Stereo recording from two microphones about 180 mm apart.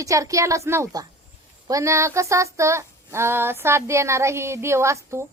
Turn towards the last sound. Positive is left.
turn(degrees=-15)  # may be behind; listen again after turning